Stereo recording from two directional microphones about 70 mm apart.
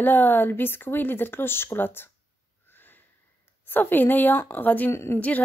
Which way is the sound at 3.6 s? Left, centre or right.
Left.